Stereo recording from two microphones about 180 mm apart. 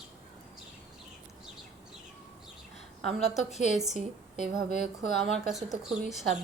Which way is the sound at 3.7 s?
Centre (ahead or behind).